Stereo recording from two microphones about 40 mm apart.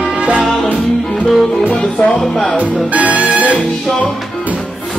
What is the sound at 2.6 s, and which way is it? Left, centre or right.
Music, right.